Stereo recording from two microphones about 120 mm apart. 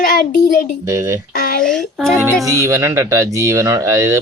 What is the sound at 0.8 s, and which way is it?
Speech, 25° right (ahead or behind).